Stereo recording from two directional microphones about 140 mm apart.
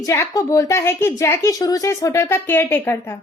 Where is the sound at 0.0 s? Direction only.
20° left (ahead or behind).